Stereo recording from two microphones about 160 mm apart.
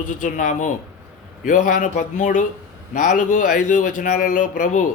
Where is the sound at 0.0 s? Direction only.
55° left (ahead or behind).